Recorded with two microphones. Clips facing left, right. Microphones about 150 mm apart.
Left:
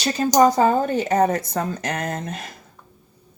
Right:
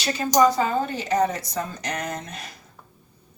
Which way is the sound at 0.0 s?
45° left (ahead or behind).